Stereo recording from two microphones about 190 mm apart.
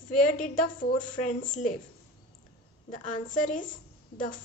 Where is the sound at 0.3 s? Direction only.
45° left (ahead or behind).